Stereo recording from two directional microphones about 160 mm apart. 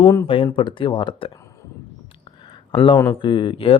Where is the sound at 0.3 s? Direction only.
35° left (ahead or behind).